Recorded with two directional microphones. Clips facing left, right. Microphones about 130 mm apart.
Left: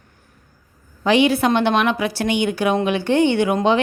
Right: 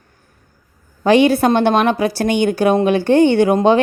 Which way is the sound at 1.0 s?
45° right (ahead or behind).